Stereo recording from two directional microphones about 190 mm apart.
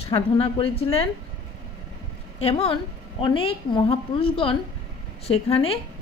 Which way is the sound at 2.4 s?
30° left (ahead or behind).